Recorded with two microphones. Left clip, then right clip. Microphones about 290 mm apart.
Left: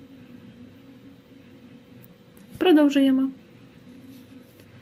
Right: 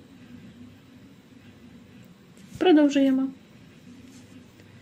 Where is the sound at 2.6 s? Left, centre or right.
Centre.